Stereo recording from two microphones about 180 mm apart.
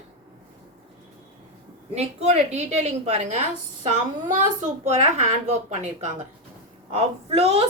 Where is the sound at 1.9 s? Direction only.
35° right (ahead or behind).